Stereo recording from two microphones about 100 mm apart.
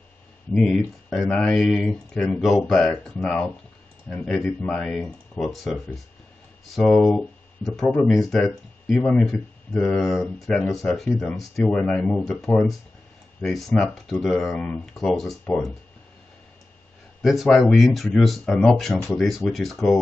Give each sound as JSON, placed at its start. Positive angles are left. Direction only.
{"t": 0.6, "sound": "speech", "side_deg": 0}
{"t": 6.9, "sound": "speech", "side_deg": 10}
{"t": 17.2, "sound": "speech", "side_deg": 0}